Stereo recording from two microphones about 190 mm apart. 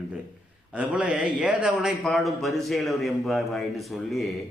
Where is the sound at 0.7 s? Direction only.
5° right (ahead or behind).